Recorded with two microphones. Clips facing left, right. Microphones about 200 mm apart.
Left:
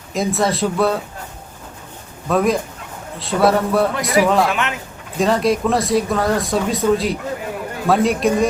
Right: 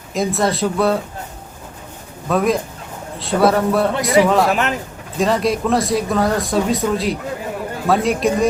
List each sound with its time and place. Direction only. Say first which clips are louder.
0.1 s speech: even; centre (ahead or behind)
2.2 s speech: even; centre (ahead or behind)
4.4 s speech: right 3 dB; 40° right (ahead or behind)
5.1 s speech: left 1 dB; centre (ahead or behind)